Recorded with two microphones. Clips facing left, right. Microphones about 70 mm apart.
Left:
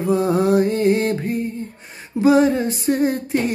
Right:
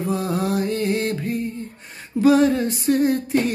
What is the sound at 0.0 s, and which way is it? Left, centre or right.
Mantra, left.